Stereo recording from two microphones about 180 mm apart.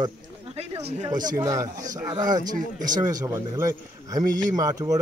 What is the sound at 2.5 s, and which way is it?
Speech, 45° right (ahead or behind).